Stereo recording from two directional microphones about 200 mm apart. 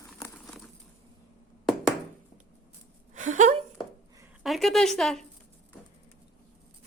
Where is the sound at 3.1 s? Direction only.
35° right (ahead or behind).